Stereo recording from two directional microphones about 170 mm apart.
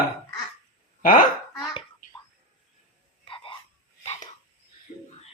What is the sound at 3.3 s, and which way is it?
Hiccup, 30° left (ahead or behind).